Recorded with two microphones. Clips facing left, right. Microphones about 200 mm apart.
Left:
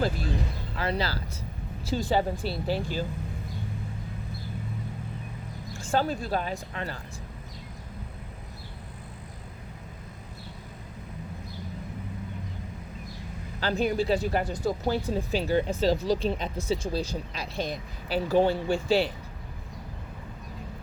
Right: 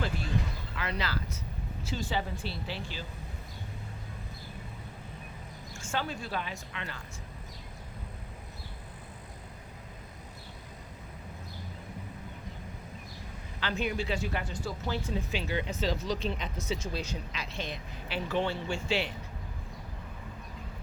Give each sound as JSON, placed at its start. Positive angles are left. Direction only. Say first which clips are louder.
{"t": 0.8, "sound": "a sound", "louder": "left 5 dB", "side_deg": 35}
{"t": 1.8, "sound": "speech", "louder": "left 8 dB", "side_deg": 35}
{"t": 5.7, "sound": "speech", "louder": "left 8 dB", "side_deg": 35}
{"t": 13.6, "sound": "speech", "louder": "left 7 dB", "side_deg": 35}